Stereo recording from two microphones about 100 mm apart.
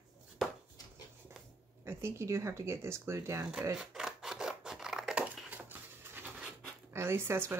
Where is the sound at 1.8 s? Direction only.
25° right (ahead or behind).